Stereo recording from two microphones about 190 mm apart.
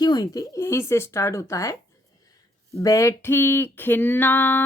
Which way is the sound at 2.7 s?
15° left (ahead or behind).